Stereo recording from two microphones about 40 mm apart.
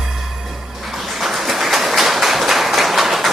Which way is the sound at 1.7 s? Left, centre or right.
Centre.